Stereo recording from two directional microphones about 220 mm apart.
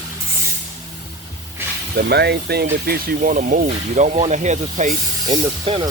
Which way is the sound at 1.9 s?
45° right (ahead or behind).